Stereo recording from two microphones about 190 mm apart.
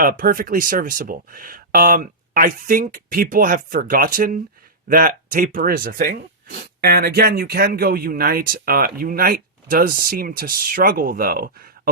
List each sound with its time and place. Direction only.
0.0 s speech: 45° right (ahead or behind)